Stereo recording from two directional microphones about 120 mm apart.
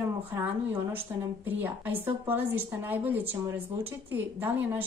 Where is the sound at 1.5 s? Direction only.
15° right (ahead or behind).